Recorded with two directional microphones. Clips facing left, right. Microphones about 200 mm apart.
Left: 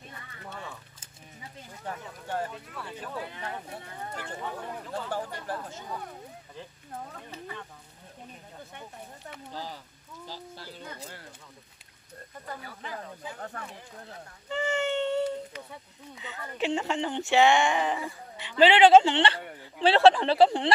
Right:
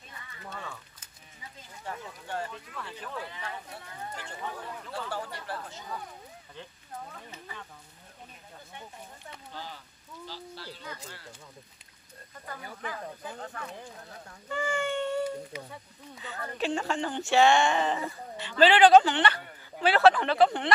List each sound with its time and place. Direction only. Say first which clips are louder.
2.7 s speech: left 1 dB; 10° left (ahead or behind)
3.3 s speech: left 3 dB; 45° left (ahead or behind)
4.6 s speech: left 2 dB; 15° left (ahead or behind)
5.3 s speech: left 3 dB; 45° left (ahead or behind)
9.2 s speech: left 4 dB; 35° left (ahead or behind)
14.5 s a sound: left 2 dB; 25° left (ahead or behind)
15.5 s speech: right 2 dB; 10° right (ahead or behind)
16.2 s speech: left 1 dB; 20° left (ahead or behind)